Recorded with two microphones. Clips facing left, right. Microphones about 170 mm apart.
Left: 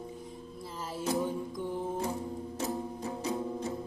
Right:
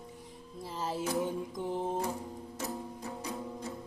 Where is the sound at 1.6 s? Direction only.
20° right (ahead or behind).